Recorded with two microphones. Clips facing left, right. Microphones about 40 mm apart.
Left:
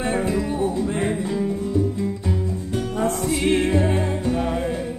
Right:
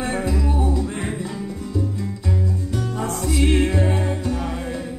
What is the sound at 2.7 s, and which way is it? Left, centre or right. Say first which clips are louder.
Music: left 6 dB; left.